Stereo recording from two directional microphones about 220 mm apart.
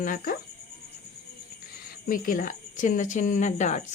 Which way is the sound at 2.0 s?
40° left (ahead or behind).